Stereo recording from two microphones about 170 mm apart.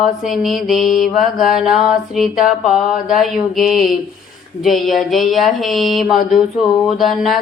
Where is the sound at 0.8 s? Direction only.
50° left (ahead or behind).